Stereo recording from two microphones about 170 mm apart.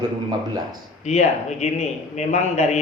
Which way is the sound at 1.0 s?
40° left (ahead or behind).